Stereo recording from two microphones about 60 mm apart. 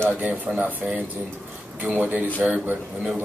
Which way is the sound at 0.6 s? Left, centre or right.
Right.